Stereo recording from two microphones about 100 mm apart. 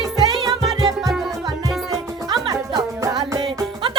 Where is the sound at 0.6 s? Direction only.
Centre (ahead or behind).